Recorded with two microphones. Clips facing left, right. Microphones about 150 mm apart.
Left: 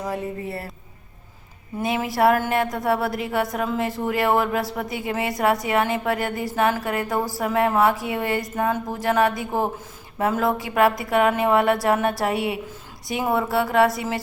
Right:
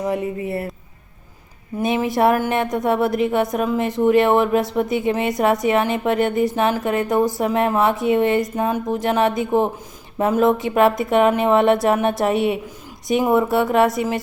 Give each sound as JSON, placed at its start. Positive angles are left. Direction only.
{"t": 0.0, "sound": "a woman's voice", "side_deg": -20}
{"t": 1.8, "sound": "a woman's voice", "side_deg": -20}